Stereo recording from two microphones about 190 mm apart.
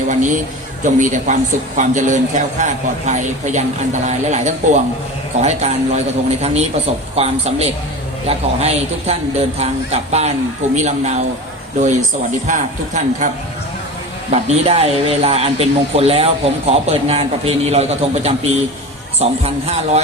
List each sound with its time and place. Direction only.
0.1 s speech: 40° right (ahead or behind)